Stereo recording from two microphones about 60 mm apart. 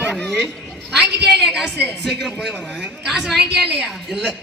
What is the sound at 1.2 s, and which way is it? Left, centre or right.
A woman's voice, centre.